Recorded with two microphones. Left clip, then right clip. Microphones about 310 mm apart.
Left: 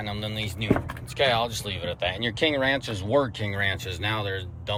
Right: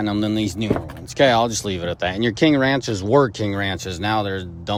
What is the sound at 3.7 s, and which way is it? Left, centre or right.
Speech, centre.